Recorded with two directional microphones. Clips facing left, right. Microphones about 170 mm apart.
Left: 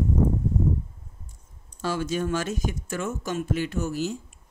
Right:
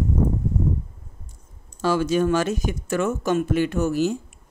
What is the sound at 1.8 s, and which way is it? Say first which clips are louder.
Speech: right 7 dB; 90° right.